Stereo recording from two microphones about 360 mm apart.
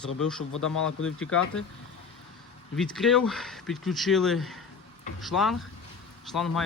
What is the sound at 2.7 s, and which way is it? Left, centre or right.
Speech, centre.